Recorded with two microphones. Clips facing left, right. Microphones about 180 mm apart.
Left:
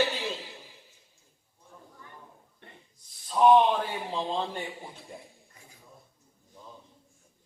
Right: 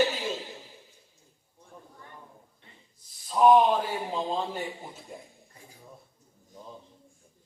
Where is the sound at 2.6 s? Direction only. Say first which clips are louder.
Left 6 dB; 60° left (ahead or behind).